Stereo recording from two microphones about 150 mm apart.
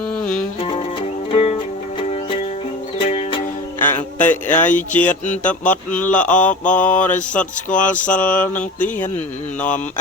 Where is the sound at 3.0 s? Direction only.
40° left (ahead or behind).